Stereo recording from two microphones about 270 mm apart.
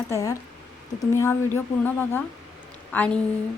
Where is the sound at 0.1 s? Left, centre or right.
Centre.